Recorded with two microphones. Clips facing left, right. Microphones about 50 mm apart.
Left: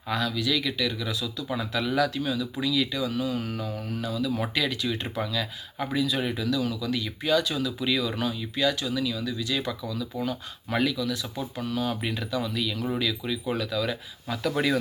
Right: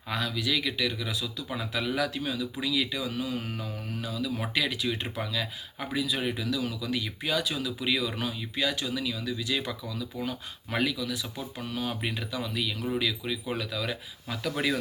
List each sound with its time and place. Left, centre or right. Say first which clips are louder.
0.1 s speech: left 3 dB; right
4.5 s speech: left 1 dB; centre